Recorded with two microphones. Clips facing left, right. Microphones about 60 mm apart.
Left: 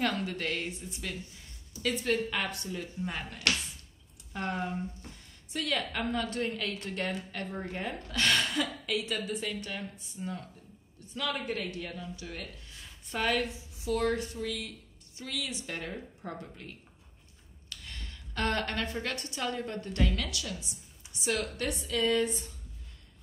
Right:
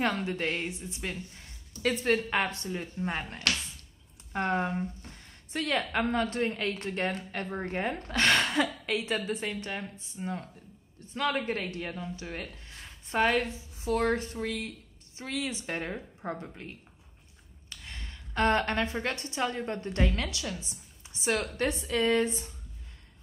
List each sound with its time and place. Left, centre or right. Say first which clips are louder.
0.0 s a woman's voice: right 2 dB; right
1.8 s a woman's voice: right 3 dB; right